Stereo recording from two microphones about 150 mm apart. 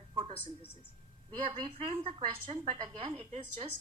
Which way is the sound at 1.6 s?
40° right (ahead or behind).